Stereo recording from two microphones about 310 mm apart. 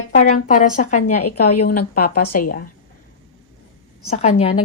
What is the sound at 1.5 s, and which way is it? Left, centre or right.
Speech, left.